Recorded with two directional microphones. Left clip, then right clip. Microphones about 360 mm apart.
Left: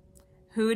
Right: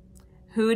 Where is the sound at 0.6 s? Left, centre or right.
Centre.